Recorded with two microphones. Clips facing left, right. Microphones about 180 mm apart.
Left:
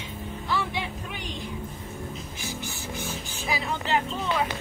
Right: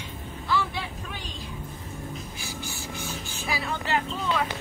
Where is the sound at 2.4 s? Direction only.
20° left (ahead or behind).